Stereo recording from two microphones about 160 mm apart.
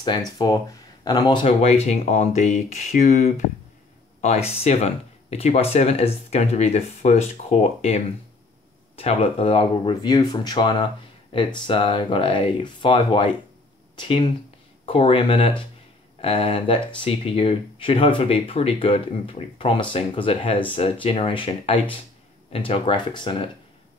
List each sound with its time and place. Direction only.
0.0 s speech: 25° left (ahead or behind)
1.6 s speech: 40° left (ahead or behind)